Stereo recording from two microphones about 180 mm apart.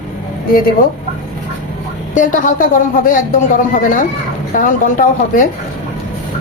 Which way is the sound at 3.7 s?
50° left (ahead or behind).